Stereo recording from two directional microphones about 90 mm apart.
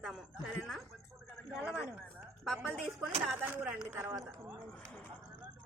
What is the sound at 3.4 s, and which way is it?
Speech, 20° right (ahead or behind).